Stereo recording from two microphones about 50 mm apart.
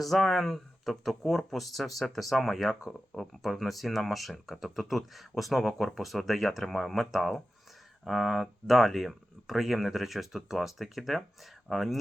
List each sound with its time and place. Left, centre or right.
0.0 s speech: centre